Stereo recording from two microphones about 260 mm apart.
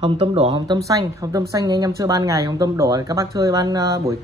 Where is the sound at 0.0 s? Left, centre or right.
Right.